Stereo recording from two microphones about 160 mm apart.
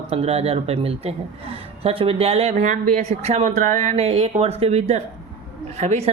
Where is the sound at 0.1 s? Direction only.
40° right (ahead or behind).